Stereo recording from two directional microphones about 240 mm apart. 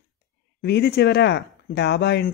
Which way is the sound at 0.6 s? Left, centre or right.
Left.